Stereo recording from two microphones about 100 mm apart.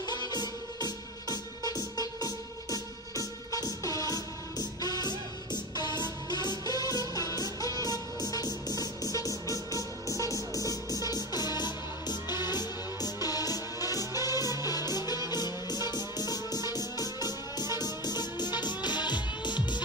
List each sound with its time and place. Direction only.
0.0 s music: 45° left (ahead or behind)